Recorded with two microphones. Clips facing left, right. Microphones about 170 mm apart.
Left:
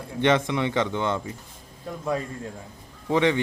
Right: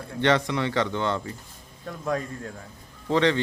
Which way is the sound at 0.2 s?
20° left (ahead or behind).